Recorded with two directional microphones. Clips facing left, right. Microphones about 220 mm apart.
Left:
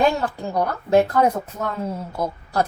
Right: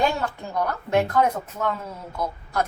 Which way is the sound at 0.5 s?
35° left (ahead or behind).